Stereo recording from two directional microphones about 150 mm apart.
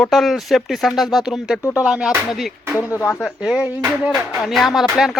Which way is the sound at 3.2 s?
5° right (ahead or behind).